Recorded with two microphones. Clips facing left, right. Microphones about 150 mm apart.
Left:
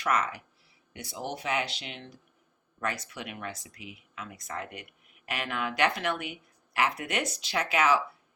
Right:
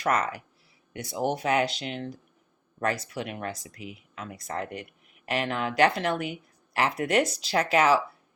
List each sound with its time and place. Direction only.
0.0 s speech: 35° right (ahead or behind)